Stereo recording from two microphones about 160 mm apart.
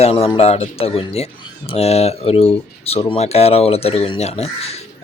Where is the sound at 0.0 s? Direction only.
35° left (ahead or behind).